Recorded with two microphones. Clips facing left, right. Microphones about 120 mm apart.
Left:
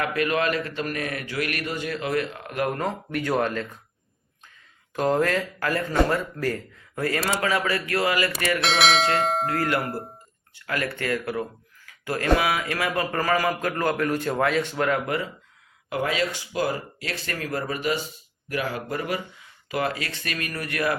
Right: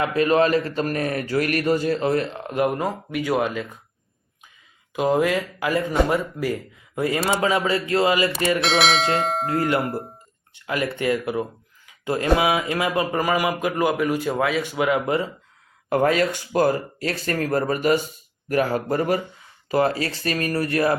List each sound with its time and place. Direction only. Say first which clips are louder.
0.0 s a man's voice: right 5 dB; 30° right (ahead or behind); by 3.7 s 10° right (ahead or behind)
4.9 s speech: right 2 dB; 10° right (ahead or behind); by 8.6 s 25° right (ahead or behind)
8.6 s speech: left 1 dB; centre (ahead or behind)
9.5 s speech: right 3 dB; 25° right (ahead or behind)
9.9 s speech: right 3 dB; centre (ahead or behind)
10.5 s speech: right 3 dB; 20° right (ahead or behind)
15.0 s speech: right 5 dB; 20° right (ahead or behind)
15.9 s a man's voice: right 6 dB; 45° right (ahead or behind)